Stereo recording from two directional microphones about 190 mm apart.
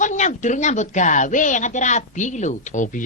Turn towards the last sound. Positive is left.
turn(degrees=40)  # may be behind; listen again after turning